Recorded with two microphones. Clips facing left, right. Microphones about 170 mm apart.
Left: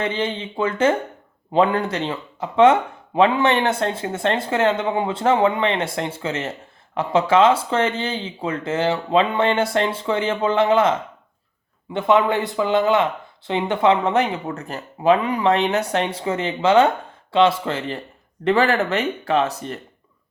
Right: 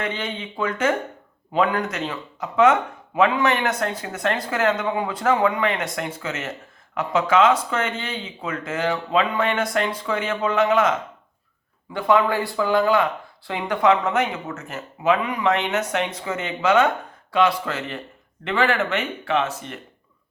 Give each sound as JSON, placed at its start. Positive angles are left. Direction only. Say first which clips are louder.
{"t": 0.0, "sound": "speech", "louder": "left 4 dB", "side_deg": 25}